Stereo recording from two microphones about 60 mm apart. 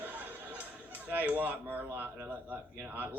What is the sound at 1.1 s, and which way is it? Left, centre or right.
Speech, right.